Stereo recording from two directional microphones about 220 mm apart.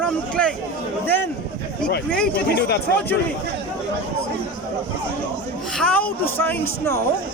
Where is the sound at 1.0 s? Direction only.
10° left (ahead or behind).